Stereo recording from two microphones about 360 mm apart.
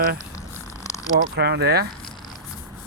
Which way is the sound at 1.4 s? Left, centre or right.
Right.